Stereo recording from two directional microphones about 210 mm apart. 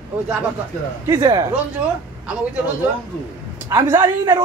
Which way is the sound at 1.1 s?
20° right (ahead or behind).